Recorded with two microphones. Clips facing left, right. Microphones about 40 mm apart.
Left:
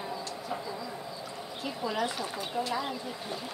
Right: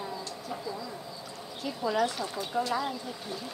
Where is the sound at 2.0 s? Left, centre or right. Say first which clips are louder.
Right 1 dB; centre.